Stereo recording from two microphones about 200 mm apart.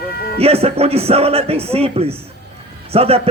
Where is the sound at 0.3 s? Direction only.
30° right (ahead or behind).